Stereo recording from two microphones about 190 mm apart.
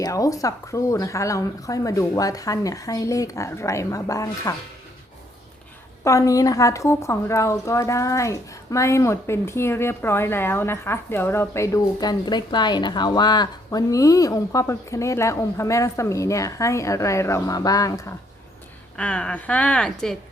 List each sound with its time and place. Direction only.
0.0 s a woman's voice: 15° left (ahead or behind)
6.1 s a woman's voice: 15° left (ahead or behind)
18.9 s a woman's voice: 5° left (ahead or behind)